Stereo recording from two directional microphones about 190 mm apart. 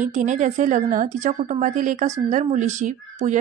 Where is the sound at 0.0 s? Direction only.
40° right (ahead or behind).